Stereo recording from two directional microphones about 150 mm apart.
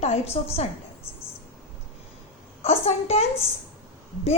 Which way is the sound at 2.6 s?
40° left (ahead or behind).